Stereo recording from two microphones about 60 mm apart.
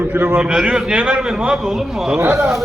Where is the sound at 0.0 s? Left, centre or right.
Right.